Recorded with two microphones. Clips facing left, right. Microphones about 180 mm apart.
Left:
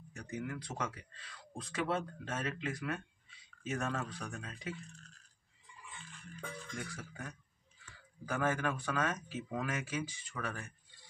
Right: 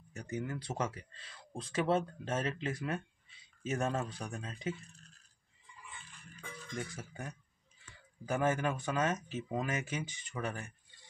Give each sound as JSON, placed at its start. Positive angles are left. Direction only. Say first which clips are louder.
{"t": 0.1, "sound": "speech", "louder": "right 2 dB", "side_deg": -30}
{"t": 6.7, "sound": "speech", "louder": "right 3 dB", "side_deg": -25}